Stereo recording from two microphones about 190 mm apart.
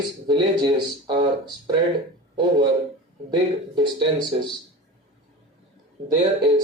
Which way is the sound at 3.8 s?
25° right (ahead or behind).